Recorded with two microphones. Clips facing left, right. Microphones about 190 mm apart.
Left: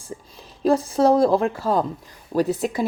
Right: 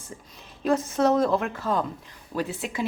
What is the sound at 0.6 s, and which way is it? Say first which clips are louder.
A woman's voice: left 4 dB; 35° left (ahead or behind).